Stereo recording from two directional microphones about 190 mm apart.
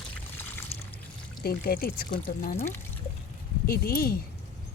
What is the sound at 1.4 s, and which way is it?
Speech, 55° left (ahead or behind).